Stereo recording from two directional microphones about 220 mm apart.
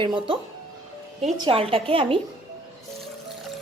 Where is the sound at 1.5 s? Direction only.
25° right (ahead or behind).